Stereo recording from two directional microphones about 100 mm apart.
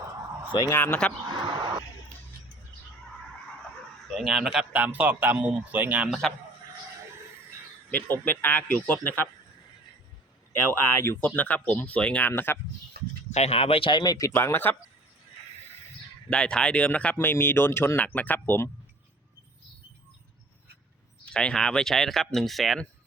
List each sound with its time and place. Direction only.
0.5 s speech: 50° left (ahead or behind)
0.9 s speech: 10° left (ahead or behind)
1.3 s a sound: 50° right (ahead or behind)
4.1 s speech: centre (ahead or behind)
4.5 s a man's voice: 15° right (ahead or behind)
7.9 s a man's voice: 20° left (ahead or behind)
10.7 s a man's voice: 20° left (ahead or behind)
13.3 s speech: 90° left; by 14.0 s 60° left (ahead or behind)
14.0 s speech: 40° left (ahead or behind)
14.3 s a man's voice: 25° left (ahead or behind)
16.3 s speech: 10° left (ahead or behind)
21.3 s speech: 10° left (ahead or behind)